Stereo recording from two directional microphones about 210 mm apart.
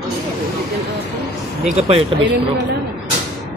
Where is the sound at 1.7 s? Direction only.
30° right (ahead or behind).